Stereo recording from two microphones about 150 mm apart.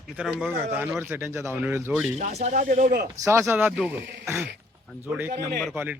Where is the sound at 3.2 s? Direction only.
15° right (ahead or behind).